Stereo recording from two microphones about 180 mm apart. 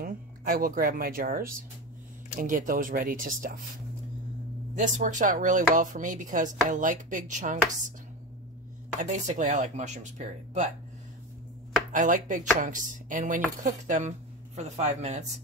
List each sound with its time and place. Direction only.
0.0 s speech: 50° right (ahead or behind)
2.4 s speech: 45° right (ahead or behind)
4.7 s speech: 45° right (ahead or behind)
9.1 s speech: 45° right (ahead or behind)
11.9 s speech: 45° right (ahead or behind)